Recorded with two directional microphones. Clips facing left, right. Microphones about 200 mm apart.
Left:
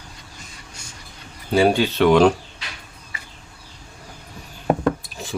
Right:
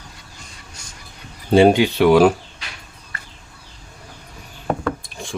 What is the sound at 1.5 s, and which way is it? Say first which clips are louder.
Speech: right 5 dB; 25° right (ahead or behind).